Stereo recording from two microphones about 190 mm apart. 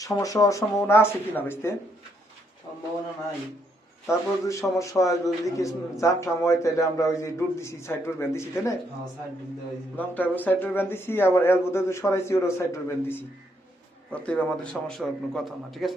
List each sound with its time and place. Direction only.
0.0 s a man's voice: 20° left (ahead or behind)
4.0 s a man's voice: 15° left (ahead or behind)
10.0 s a man's voice: 10° left (ahead or behind)